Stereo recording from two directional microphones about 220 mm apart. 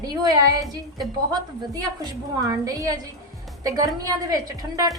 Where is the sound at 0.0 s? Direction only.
20° right (ahead or behind).